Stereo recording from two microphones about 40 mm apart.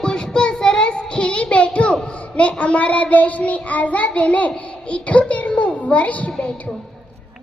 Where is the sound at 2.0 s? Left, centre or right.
Left.